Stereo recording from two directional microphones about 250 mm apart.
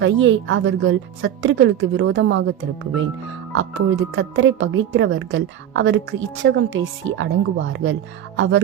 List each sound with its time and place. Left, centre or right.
0.0 s speech: right
3.5 s speech: right